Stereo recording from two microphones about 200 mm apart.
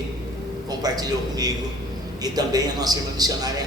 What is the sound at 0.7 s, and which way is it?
A man's voice, 20° right (ahead or behind).